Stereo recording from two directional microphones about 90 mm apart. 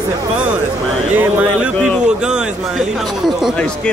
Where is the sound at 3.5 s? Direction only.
10° left (ahead or behind).